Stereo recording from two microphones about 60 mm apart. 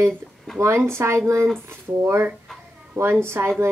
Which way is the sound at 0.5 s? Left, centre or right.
Right.